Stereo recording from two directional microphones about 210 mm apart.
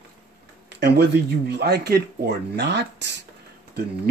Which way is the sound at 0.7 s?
55° right (ahead or behind).